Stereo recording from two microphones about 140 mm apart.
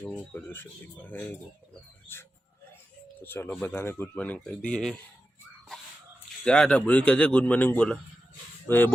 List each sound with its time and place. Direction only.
0.3 s speech: 15° left (ahead or behind)
3.2 s speech: 15° left (ahead or behind)
6.4 s speech: 5° left (ahead or behind)